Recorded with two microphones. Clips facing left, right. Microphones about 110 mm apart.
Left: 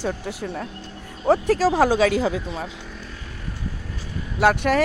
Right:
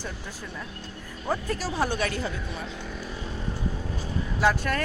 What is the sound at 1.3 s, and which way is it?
Speech, 90° left.